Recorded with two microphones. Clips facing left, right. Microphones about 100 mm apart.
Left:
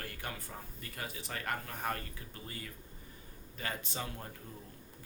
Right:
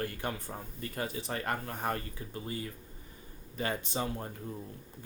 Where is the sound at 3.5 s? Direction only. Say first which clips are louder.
Right 7 dB; 25° right (ahead or behind).